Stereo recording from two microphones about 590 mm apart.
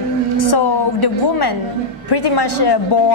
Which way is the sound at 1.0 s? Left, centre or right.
Left.